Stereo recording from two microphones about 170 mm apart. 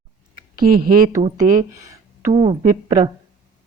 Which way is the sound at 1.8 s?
20° right (ahead or behind).